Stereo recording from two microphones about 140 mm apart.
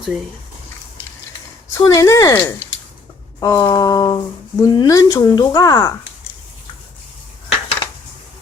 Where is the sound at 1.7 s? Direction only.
25° left (ahead or behind).